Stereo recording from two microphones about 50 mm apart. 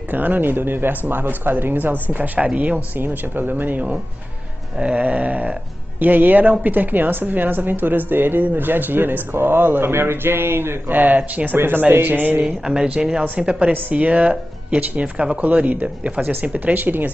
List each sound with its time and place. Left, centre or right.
0.1 s speech: right
2.1 s speech: right
11.0 s speech: right
11.5 s speech: right
11.9 s speech: right
12.4 s speech: centre; by 16.1 s right
16.2 s speech: right